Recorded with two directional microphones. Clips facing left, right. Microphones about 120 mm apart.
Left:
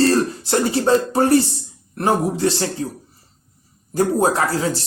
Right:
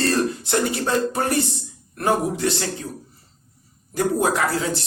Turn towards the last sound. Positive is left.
turn(degrees=35)  # may be behind; listen again after turning